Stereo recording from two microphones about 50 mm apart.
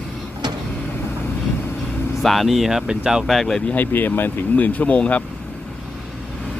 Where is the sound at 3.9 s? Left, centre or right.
Left.